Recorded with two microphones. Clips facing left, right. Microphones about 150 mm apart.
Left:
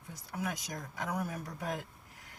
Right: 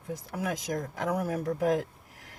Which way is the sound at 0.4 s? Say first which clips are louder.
Right 8 dB; 50° right (ahead or behind).